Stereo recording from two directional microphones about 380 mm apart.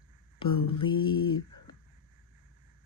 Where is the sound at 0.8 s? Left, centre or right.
Centre.